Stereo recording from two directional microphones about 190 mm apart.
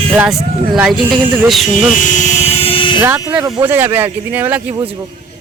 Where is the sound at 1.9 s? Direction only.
40° left (ahead or behind).